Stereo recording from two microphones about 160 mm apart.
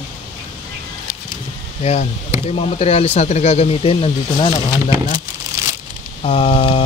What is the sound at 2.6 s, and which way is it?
Speech, 40° left (ahead or behind).